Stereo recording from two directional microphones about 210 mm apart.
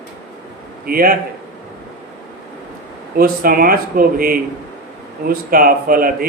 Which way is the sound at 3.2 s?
45° right (ahead or behind).